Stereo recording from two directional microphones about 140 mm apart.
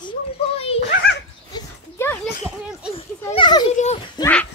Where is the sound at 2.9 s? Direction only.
40° left (ahead or behind).